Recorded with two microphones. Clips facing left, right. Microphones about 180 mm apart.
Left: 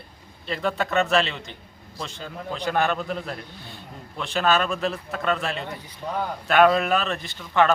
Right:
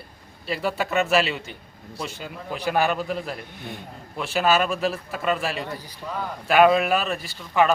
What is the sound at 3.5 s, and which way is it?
Speech, 20° right (ahead or behind).